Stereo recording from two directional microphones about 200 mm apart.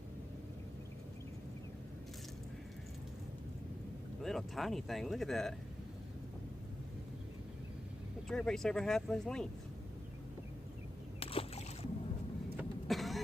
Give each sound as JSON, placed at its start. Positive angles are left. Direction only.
{"t": 4.2, "sound": "speech", "side_deg": 0}
{"t": 8.3, "sound": "speech", "side_deg": 0}
{"t": 11.2, "sound": "rowboat", "side_deg": 30}
{"t": 12.5, "sound": "vehicle", "side_deg": 0}